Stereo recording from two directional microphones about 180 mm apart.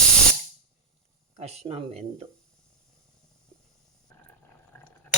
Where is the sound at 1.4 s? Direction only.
35° right (ahead or behind).